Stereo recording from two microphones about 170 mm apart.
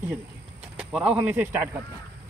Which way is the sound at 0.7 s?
5° right (ahead or behind).